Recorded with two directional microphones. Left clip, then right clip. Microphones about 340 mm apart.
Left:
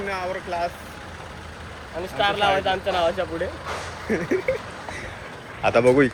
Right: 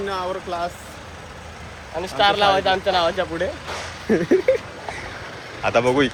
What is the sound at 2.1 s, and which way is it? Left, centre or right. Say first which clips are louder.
Speech: right 4 dB; right.